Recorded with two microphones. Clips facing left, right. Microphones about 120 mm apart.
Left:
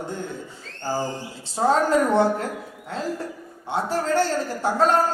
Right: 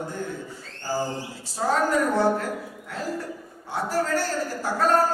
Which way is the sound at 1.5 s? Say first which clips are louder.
Left 4 dB; 30° left (ahead or behind).